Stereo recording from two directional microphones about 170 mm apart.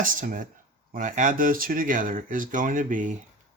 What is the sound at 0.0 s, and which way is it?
Speech, 50° right (ahead or behind).